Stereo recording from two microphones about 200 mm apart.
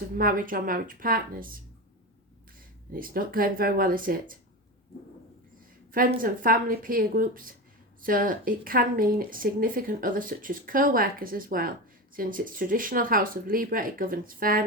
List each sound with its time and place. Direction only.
0.2 s speech: 45° right (ahead or behind)
2.9 s speech: 45° right (ahead or behind)
5.9 s speech: 45° right (ahead or behind)